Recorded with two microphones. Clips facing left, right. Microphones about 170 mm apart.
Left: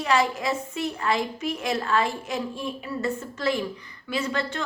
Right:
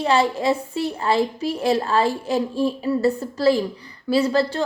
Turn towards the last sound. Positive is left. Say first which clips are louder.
# right 9 dB
turn(degrees=-35)  # may be behind; listen again after turning